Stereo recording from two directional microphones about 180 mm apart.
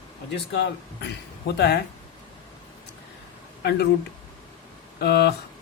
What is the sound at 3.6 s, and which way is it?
Speech, 65° left (ahead or behind).